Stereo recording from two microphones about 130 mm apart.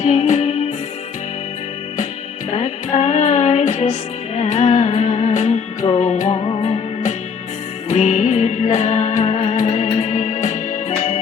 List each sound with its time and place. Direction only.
0.0 s music: 60° left (ahead or behind)
2.5 s music: 60° left (ahead or behind)
6.4 s music: 50° left (ahead or behind)